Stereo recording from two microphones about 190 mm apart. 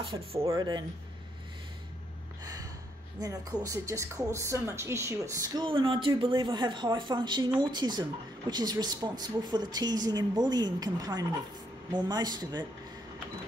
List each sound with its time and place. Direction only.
0.0 s speech: 30° right (ahead or behind)
2.4 s gasp: 20° right (ahead or behind)
3.2 s speech: 15° right (ahead or behind)